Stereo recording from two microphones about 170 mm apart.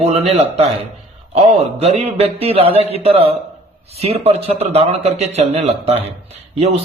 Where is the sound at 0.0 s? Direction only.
35° right (ahead or behind).